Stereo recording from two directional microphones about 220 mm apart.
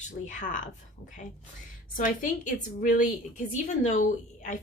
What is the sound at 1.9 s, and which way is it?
Speech, 35° left (ahead or behind).